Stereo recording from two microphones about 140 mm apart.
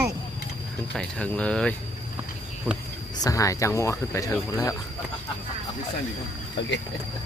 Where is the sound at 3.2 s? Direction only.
25° left (ahead or behind).